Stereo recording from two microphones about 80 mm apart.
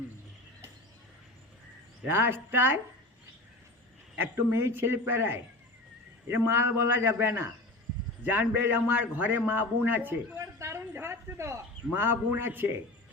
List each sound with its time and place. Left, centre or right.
2.0 s a man's voice: right
4.2 s a man's voice: right
10.3 s a sound: right
10.9 s a man's voice: right